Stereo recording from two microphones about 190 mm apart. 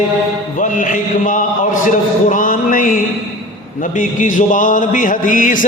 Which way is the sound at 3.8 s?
45° left (ahead or behind).